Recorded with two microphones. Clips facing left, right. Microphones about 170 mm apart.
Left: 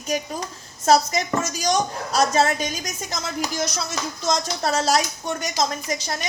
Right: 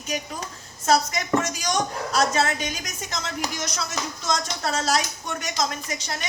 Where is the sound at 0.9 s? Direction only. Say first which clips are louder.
Left 3 dB; 35° left (ahead or behind).